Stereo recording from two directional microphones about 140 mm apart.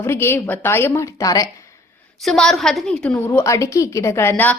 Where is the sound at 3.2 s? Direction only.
20° left (ahead or behind).